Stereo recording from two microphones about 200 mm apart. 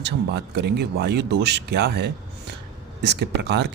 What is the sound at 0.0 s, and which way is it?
Speech, 55° right (ahead or behind).